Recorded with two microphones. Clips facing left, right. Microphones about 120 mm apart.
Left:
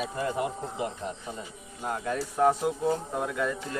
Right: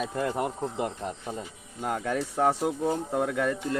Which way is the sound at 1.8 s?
65° right (ahead or behind).